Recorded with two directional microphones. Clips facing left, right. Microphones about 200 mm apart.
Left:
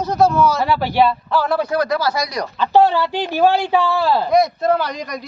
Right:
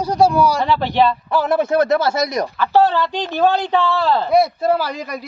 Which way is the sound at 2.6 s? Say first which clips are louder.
Left 2 dB; 15° left (ahead or behind).